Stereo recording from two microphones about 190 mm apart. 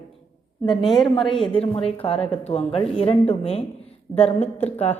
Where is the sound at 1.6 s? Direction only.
30° left (ahead or behind).